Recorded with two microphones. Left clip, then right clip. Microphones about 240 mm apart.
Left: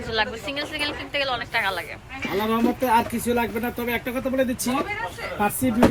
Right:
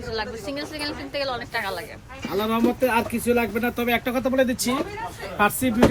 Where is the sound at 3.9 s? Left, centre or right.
Right.